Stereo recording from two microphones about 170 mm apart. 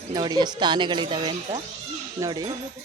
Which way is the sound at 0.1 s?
25° right (ahead or behind).